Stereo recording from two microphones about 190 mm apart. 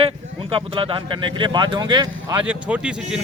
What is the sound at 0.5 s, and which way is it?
Speech, 25° right (ahead or behind).